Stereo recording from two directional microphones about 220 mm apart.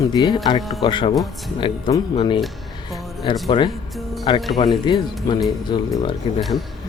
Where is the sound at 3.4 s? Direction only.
20° left (ahead or behind).